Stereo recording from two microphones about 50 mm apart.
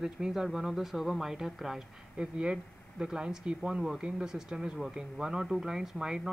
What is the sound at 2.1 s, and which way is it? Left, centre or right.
Speech, right.